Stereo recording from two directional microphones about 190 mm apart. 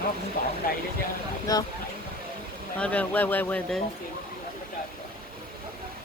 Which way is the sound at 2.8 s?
10° left (ahead or behind).